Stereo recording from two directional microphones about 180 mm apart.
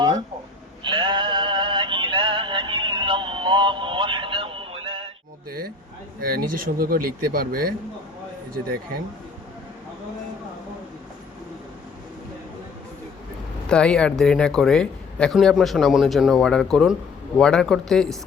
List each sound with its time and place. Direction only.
0.9 s synthetic singing: 25° right (ahead or behind)
5.5 s a sound: 55° right (ahead or behind)
6.1 s speech: 50° right (ahead or behind)
13.7 s speech: 5° left (ahead or behind)